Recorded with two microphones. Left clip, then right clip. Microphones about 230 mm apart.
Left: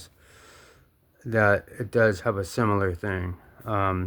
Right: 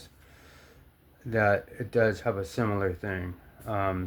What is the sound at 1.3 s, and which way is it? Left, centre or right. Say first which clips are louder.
Speech: left 3 dB; left.